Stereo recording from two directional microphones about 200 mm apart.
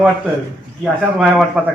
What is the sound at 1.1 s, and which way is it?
Speech, centre (ahead or behind).